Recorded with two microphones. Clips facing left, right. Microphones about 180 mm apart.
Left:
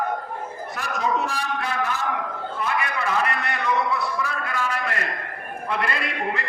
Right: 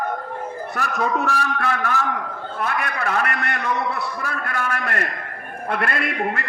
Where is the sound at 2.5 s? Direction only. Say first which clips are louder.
Right 2 dB; 60° right (ahead or behind).